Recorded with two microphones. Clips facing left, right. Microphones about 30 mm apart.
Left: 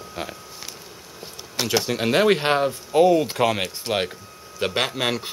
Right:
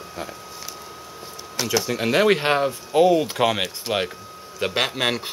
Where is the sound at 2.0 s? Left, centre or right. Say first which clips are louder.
Right 1 dB; centre.